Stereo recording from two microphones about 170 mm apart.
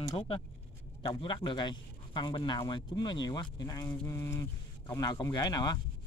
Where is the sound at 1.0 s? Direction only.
30° left (ahead or behind).